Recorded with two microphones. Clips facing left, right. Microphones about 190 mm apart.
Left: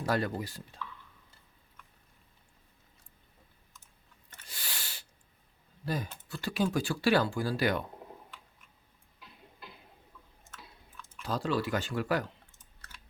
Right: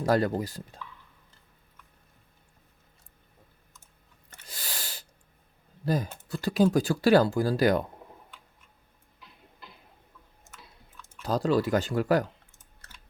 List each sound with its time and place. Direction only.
0.0 s speech: 40° right (ahead or behind)
4.3 s a sound: 40° right (ahead or behind)
5.8 s speech: 40° right (ahead or behind)
11.2 s speech: 40° right (ahead or behind)